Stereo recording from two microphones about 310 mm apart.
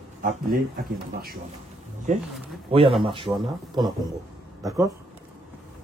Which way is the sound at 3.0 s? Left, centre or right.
Centre.